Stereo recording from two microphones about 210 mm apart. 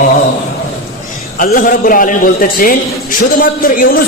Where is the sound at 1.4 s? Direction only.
40° left (ahead or behind).